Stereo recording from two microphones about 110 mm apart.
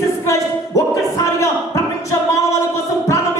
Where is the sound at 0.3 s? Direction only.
30° left (ahead or behind).